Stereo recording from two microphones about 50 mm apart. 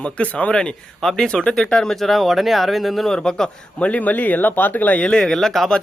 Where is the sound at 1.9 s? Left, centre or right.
Centre.